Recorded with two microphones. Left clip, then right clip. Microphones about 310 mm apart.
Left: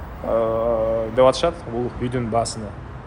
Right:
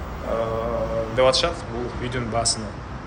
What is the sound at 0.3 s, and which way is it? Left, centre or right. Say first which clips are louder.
Mantra: left 5 dB; centre.